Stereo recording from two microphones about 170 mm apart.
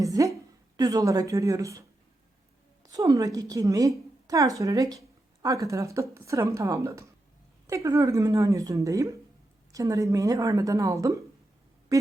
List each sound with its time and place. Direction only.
0.0 s a woman's voice: 20° right (ahead or behind)
2.8 s a woman's voice: 20° right (ahead or behind)